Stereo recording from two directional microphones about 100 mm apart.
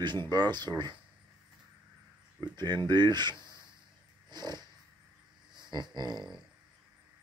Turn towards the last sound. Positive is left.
turn(degrees=-45)  # may be behind; listen again after turning